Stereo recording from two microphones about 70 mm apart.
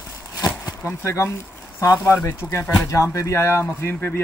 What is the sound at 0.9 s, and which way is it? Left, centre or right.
Speech, left.